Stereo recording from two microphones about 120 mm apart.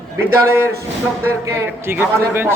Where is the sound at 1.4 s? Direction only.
20° right (ahead or behind).